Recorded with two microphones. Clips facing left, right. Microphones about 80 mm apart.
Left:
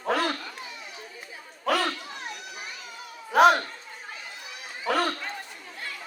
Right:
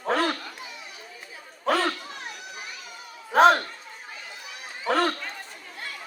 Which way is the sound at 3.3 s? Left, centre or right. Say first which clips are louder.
Right 1 dB; right.